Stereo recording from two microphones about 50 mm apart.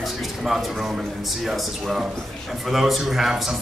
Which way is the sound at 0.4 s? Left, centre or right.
Centre.